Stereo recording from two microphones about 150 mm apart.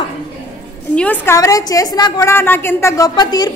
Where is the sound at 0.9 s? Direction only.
10° left (ahead or behind).